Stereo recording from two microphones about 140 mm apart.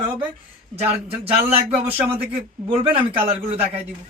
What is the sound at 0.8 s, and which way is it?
Speech, 45° right (ahead or behind).